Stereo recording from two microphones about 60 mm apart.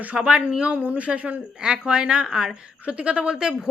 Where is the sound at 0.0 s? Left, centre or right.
Right.